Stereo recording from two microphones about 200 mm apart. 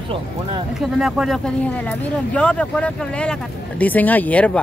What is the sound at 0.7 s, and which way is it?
Speech, centre (ahead or behind).